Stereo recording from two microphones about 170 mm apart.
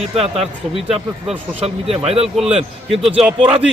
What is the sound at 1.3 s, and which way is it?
Speech, 35° right (ahead or behind).